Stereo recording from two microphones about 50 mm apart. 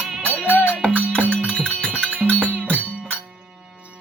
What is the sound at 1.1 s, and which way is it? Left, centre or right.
Music, left.